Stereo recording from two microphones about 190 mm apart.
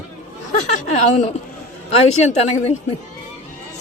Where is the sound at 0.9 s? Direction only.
35° left (ahead or behind).